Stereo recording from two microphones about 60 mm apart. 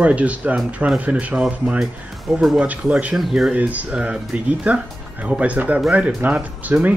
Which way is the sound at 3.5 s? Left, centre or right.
Right.